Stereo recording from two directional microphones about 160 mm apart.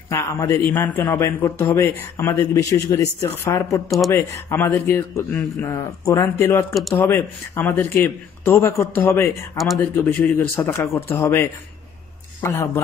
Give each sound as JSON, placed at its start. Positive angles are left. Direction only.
{"t": 0.1, "sound": "a man's voice", "side_deg": 15}